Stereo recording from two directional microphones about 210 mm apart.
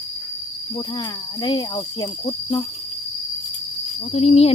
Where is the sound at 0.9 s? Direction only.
20° left (ahead or behind).